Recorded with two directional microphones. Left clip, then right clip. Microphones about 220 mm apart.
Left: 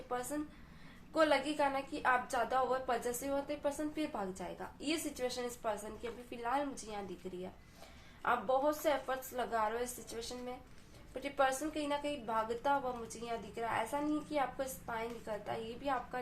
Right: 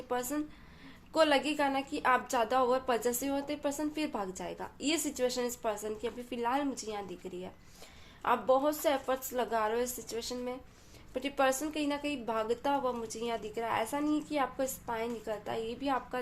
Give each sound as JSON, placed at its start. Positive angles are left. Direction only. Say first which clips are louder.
{"t": 0.1, "sound": "a woman's voice", "louder": "right 5 dB", "side_deg": -40}
{"t": 8.2, "sound": "a woman's voice", "louder": "right 5 dB", "side_deg": -35}